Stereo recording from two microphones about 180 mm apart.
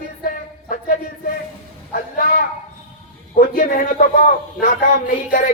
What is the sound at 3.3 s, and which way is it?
A man's voice, 50° left (ahead or behind).